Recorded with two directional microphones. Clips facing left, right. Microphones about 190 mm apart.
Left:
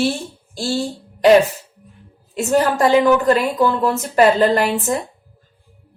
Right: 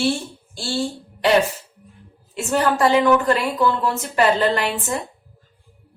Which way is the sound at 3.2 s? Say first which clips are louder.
Left 3 dB; 40° left (ahead or behind).